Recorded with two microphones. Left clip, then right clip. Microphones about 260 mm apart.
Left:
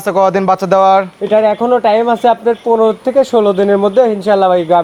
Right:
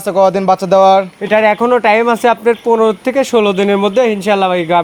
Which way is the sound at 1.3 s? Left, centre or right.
Right.